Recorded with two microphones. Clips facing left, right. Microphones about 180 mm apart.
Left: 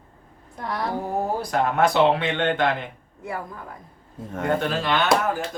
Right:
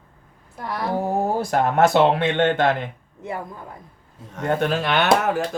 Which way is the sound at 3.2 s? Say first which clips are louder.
Right 1 dB; 20° right (ahead or behind).